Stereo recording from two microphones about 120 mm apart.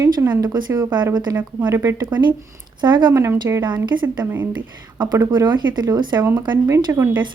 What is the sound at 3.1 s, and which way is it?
Speech, 20° right (ahead or behind).